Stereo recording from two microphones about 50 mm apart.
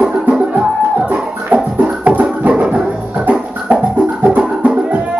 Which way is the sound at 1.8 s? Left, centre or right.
Right.